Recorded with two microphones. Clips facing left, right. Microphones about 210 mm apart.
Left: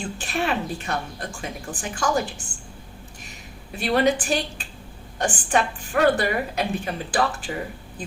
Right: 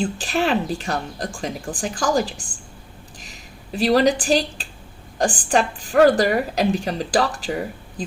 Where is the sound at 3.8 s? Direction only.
35° right (ahead or behind).